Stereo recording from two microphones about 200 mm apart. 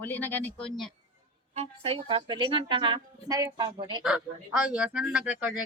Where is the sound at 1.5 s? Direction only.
30° right (ahead or behind).